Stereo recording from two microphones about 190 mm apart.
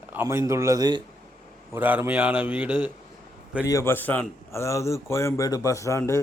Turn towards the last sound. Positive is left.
turn(degrees=15)  # may be behind; listen again after turning